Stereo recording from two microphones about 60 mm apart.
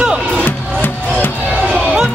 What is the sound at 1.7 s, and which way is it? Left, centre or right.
Music, centre.